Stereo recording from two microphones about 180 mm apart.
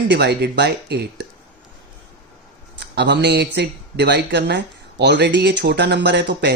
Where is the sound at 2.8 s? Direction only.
70° right (ahead or behind).